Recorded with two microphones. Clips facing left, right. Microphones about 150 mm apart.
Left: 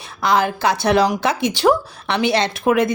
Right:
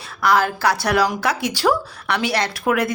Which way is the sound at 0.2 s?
20° left (ahead or behind).